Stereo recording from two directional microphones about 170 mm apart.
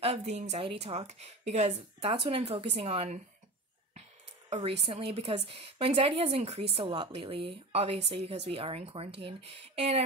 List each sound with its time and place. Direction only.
0.0 s a woman's voice: 40° right (ahead or behind)
4.5 s a woman's voice: 35° right (ahead or behind)